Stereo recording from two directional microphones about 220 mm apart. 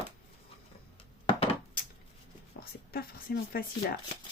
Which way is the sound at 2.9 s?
45° left (ahead or behind).